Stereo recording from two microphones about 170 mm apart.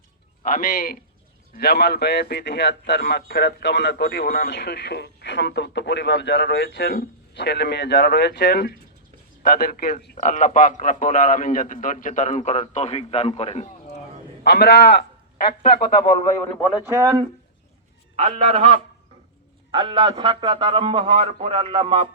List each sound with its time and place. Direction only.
0.4 s a man's voice: 55° left (ahead or behind)
1.5 s a man's voice: 70° left (ahead or behind)
9.4 s a man's voice: 60° left (ahead or behind); by 14.0 s 40° left (ahead or behind)
14.4 s a man's voice: 80° left
16.4 s a man's voice: 10° left (ahead or behind)
16.9 s speech: 20° right (ahead or behind)
18.2 s a man's voice: 35° right (ahead or behind)